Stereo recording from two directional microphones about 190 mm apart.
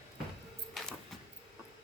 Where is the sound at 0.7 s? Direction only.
Centre (ahead or behind).